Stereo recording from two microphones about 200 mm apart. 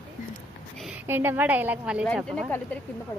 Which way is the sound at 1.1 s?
10° right (ahead or behind).